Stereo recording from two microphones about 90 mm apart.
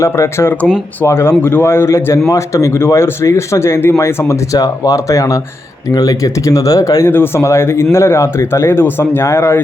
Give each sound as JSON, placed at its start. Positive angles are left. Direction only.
{"t": 0.0, "sound": "speech", "side_deg": 30}
{"t": 7.1, "sound": "speech", "side_deg": 25}